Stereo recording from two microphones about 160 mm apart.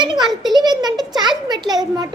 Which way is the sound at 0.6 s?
25° right (ahead or behind).